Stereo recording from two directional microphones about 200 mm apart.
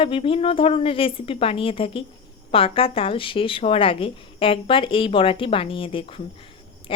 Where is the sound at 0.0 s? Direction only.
25° left (ahead or behind).